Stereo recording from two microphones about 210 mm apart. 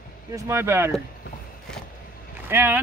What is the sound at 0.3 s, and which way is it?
Speech, 10° right (ahead or behind).